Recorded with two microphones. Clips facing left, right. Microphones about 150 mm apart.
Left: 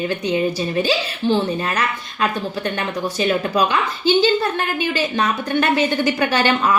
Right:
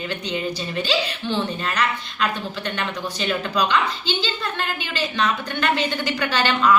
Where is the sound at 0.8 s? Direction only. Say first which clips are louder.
Left 2 dB; 45° left (ahead or behind).